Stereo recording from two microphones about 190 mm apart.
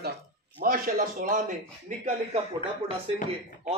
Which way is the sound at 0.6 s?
45° right (ahead or behind).